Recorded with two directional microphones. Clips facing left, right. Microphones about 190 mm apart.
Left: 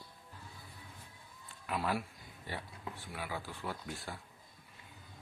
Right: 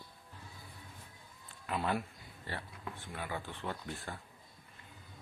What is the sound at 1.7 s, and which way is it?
Speech, 5° left (ahead or behind).